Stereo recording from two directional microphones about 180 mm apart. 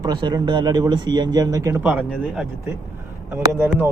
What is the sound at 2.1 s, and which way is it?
Speech, centre (ahead or behind).